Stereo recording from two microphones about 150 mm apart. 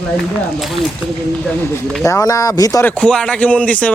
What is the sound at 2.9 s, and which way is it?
Speech, 5° left (ahead or behind).